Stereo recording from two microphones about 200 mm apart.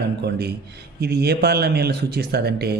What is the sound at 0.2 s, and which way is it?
A man's voice, 55° right (ahead or behind).